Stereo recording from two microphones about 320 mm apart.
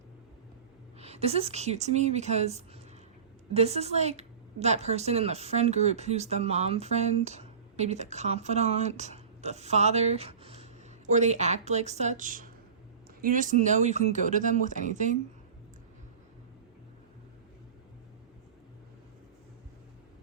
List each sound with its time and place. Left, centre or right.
0.9 s a woman's voice: centre